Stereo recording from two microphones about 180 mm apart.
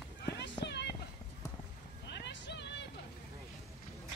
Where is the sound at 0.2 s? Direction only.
70° left (ahead or behind).